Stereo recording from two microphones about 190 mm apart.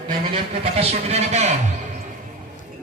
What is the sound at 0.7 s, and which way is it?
Speech, 35° right (ahead or behind).